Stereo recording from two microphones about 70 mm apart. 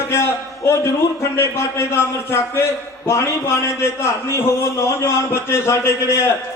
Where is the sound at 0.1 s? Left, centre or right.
Left.